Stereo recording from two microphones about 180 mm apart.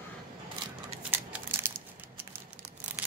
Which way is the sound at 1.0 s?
10° right (ahead or behind).